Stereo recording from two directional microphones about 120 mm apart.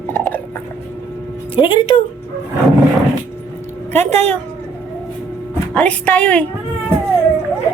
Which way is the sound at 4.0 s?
70° right (ahead or behind).